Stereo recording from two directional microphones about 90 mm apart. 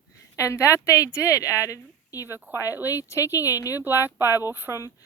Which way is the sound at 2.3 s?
25° right (ahead or behind).